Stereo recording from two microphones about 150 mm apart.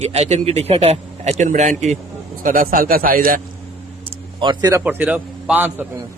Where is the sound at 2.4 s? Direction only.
65° right (ahead or behind).